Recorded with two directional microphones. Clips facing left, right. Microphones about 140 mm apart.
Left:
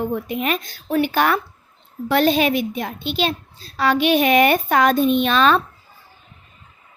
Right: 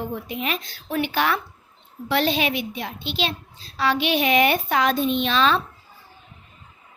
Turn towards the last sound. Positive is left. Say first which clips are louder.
# left 4 dB
turn(degrees=50)  # may be behind; listen again after turning